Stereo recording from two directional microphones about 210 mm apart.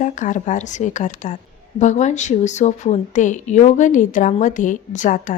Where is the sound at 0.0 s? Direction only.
35° left (ahead or behind).